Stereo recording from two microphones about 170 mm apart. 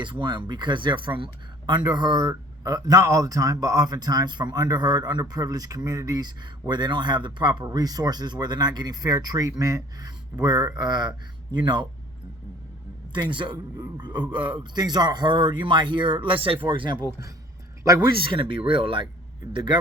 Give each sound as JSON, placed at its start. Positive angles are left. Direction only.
{"t": 0.0, "sound": "speech", "side_deg": -25}
{"t": 13.1, "sound": "speech", "side_deg": -30}
{"t": 18.2, "sound": "speech", "side_deg": -30}